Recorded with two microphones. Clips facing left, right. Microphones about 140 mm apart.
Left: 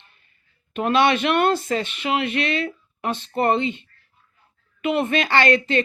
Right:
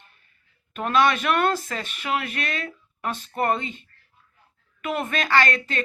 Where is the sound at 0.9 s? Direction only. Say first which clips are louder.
Left 2 dB; 30° left (ahead or behind).